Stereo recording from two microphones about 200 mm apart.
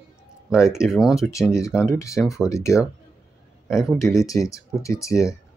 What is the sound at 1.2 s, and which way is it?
Speech, 15° left (ahead or behind).